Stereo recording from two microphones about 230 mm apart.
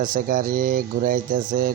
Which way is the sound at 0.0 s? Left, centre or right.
Right.